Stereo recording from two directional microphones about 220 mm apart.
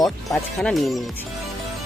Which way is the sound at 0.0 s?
Centre (ahead or behind).